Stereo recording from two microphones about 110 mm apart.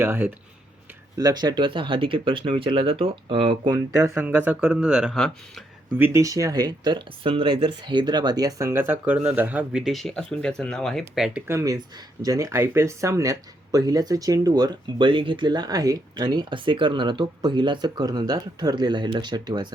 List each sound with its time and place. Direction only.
0.0 s speech: 20° right (ahead or behind)
1.1 s speech: 35° right (ahead or behind)
3.9 s speech: 25° right (ahead or behind)
4.2 s speech: 15° right (ahead or behind)
6.0 s speech: 25° right (ahead or behind); by 11.4 s centre (ahead or behind)
11.4 s speech: 30° right (ahead or behind)